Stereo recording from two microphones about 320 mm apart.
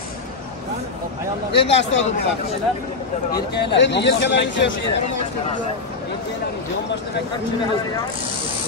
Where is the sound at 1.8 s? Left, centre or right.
Left.